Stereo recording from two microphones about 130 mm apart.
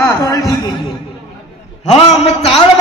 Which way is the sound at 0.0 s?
25° left (ahead or behind).